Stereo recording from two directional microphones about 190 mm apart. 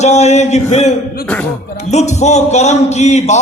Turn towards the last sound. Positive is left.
turn(degrees=35)  # may be behind; listen again after turning